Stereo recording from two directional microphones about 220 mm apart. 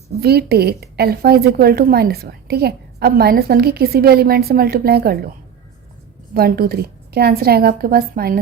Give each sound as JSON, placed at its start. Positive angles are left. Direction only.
{"t": 0.2, "sound": "a woman's voice", "side_deg": -45}
{"t": 6.3, "sound": "a woman's voice", "side_deg": -45}